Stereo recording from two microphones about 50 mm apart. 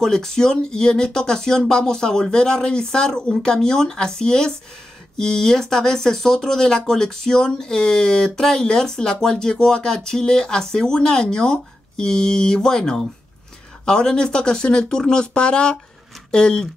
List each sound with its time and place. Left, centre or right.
0.0 s speech: centre